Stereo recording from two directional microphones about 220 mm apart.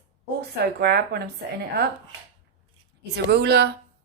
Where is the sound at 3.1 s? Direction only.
50° right (ahead or behind).